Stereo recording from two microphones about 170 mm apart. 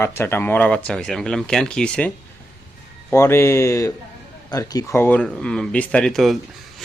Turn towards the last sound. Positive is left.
turn(degrees=0)  # may be behind; listen again after turning